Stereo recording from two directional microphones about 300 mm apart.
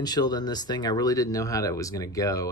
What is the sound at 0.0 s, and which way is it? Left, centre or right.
Speech, centre.